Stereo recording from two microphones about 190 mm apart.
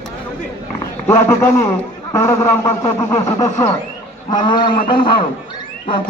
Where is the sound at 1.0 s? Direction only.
15° left (ahead or behind).